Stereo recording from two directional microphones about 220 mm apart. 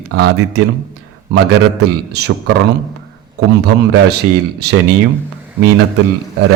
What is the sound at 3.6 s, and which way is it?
Speech, 50° right (ahead or behind).